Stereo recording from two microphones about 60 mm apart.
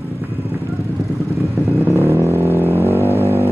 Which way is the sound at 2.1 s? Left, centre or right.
Right.